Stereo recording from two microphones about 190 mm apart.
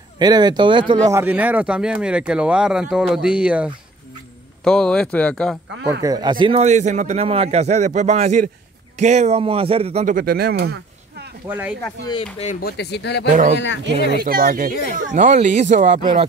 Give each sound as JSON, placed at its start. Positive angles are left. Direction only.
{"t": 0.2, "sound": "speech", "side_deg": -20}
{"t": 1.1, "sound": "speech", "side_deg": -10}
{"t": 6.0, "sound": "a man's voice", "side_deg": -20}
{"t": 10.1, "sound": "speech", "side_deg": -55}
{"t": 11.4, "sound": "speech", "side_deg": -10}
{"t": 12.4, "sound": "speech", "side_deg": 45}
{"t": 13.3, "sound": "a man's voice", "side_deg": -40}
{"t": 14.1, "sound": "a man's voice", "side_deg": -50}